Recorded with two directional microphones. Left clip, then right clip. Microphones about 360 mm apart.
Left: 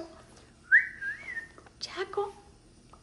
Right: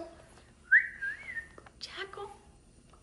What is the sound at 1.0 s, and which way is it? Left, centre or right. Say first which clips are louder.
Whistling: left 1 dB; right.